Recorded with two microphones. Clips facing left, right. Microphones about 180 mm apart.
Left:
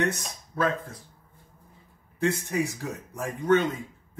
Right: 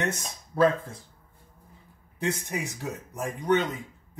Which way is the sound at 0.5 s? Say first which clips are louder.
Right 5 dB; 30° right (ahead or behind).